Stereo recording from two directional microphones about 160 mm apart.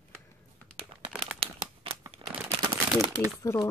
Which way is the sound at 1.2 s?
40° right (ahead or behind).